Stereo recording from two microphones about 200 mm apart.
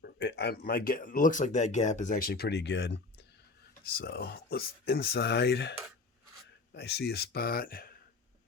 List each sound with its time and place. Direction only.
0.0 s speech: 55° left (ahead or behind)
6.7 s speech: 55° left (ahead or behind)